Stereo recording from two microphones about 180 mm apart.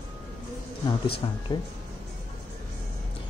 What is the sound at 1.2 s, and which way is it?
Speech, 25° left (ahead or behind).